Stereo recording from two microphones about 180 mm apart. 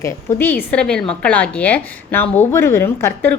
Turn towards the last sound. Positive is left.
turn(degrees=15)  # may be behind; listen again after turning